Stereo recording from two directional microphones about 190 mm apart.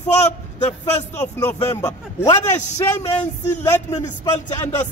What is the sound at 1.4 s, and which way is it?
A man's voice, 15° left (ahead or behind).